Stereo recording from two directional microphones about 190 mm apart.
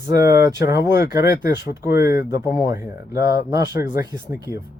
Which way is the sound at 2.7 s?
15° right (ahead or behind).